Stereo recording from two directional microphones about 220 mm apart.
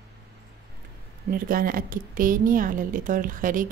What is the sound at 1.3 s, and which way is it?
A woman's voice, 40° right (ahead or behind).